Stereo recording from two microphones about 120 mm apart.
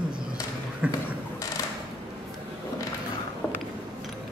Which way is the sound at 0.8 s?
10° right (ahead or behind).